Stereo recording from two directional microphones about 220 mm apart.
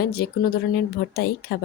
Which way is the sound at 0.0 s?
45° left (ahead or behind).